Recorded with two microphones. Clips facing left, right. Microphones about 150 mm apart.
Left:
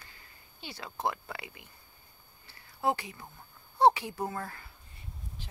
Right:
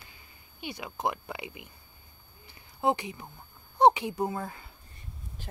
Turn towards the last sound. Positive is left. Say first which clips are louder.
# right 4 dB
turn(degrees=-20)  # may be behind; listen again after turning